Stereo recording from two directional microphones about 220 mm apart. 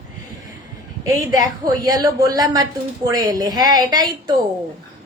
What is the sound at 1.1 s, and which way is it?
A woman's voice, 15° right (ahead or behind).